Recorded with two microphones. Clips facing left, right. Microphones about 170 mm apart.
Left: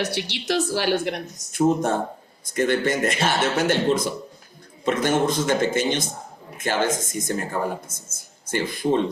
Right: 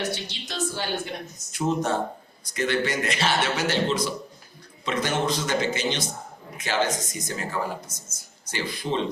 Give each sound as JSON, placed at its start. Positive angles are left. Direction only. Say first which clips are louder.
{"t": 0.0, "sound": "a woman's voice", "louder": "left 4 dB", "side_deg": 75}
{"t": 1.5, "sound": "speech", "louder": "left 5 dB", "side_deg": 50}